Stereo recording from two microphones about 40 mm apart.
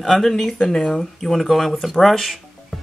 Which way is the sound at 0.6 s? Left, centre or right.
Left.